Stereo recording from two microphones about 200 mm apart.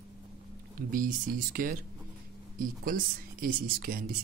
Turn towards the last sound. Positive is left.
turn(degrees=-45)  # may be behind; listen again after turning